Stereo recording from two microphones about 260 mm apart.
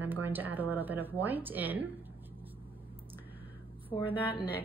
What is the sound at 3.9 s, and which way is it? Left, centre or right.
Speech, centre.